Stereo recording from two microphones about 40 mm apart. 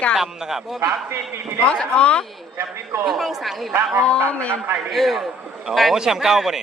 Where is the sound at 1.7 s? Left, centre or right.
Left.